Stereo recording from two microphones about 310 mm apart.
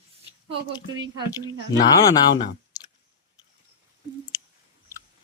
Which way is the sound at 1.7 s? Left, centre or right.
Centre.